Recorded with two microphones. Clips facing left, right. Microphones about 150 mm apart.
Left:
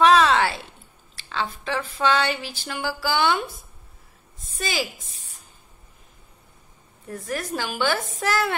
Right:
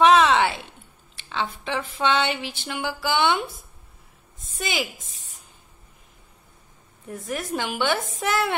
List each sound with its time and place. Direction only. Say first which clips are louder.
0.0 s a sound: even; 20° right (ahead or behind)
1.3 s speech: even; 20° right (ahead or behind)
7.5 s speech: right 1 dB; 20° right (ahead or behind)